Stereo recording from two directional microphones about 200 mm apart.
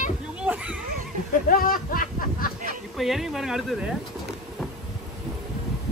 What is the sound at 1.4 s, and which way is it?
Speech, 45° left (ahead or behind).